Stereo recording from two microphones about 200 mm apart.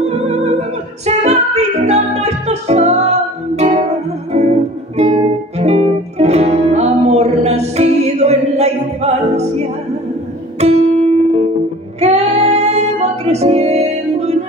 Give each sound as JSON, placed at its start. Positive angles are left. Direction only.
{"t": 0.1, "sound": "music", "side_deg": -35}
{"t": 10.6, "sound": "music", "side_deg": -30}